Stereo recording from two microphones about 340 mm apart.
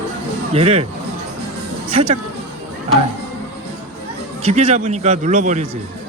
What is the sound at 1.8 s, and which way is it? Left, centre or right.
Speech, centre.